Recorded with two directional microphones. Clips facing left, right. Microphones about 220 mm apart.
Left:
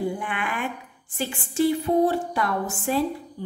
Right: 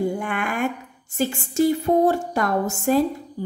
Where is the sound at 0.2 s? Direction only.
45° right (ahead or behind).